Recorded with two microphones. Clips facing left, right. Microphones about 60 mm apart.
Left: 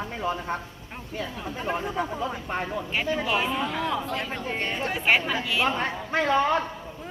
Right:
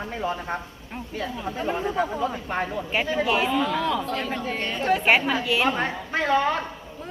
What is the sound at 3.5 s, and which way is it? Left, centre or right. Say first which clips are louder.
Speech: right 4 dB; centre.